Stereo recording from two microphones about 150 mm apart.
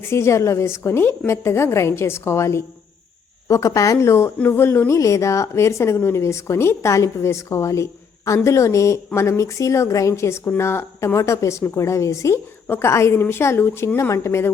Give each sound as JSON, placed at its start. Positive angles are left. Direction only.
{"t": 0.1, "sound": "a woman's voice", "side_deg": 20}